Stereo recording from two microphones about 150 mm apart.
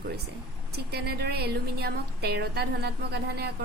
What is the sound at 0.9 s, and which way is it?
A woman's voice, 90° right.